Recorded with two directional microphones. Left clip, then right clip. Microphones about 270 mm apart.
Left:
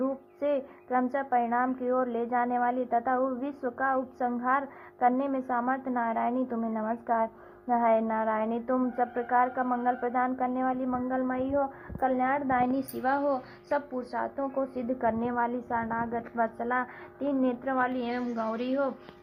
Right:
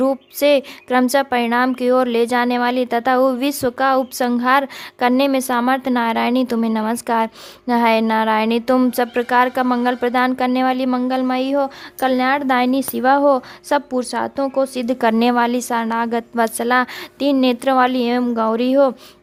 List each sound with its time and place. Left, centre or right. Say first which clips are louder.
0.0 s speech: right 14 dB; right
18.2 s speech: right 14 dB; right